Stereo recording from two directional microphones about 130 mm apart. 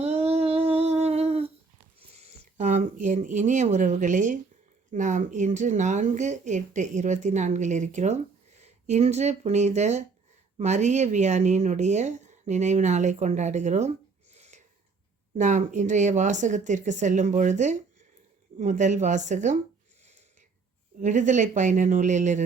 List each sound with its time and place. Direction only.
0.0 s humming: 55° right (ahead or behind)
2.0 s speech: 55° right (ahead or behind)
14.3 s a sound: 60° right (ahead or behind)
15.4 s speech: 70° right (ahead or behind)
21.0 s speech: 70° right (ahead or behind)